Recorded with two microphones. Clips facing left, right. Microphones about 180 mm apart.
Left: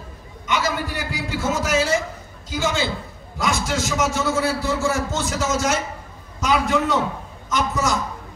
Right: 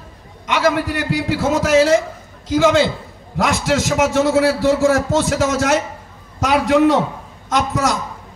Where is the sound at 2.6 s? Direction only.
90° right.